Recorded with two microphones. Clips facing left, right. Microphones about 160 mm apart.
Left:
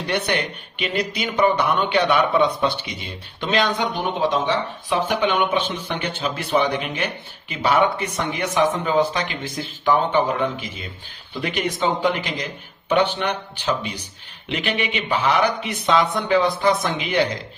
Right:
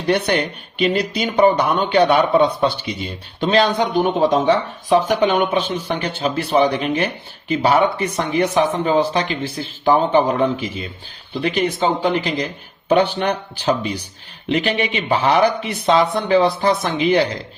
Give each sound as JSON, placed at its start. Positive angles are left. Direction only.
{"t": 0.1, "sound": "speech", "side_deg": -35}